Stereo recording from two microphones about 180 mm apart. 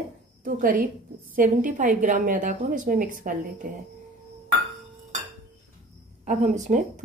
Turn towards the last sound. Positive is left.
turn(degrees=-40)  # may be behind; listen again after turning